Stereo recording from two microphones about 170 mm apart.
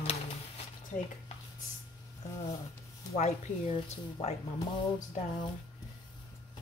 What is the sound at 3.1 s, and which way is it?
Speech, 40° left (ahead or behind).